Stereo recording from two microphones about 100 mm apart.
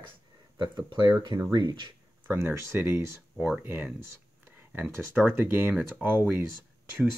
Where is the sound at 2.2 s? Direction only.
25° right (ahead or behind).